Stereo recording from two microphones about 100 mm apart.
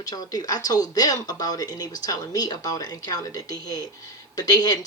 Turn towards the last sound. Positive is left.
turn(degrees=40)  # may be behind; listen again after turning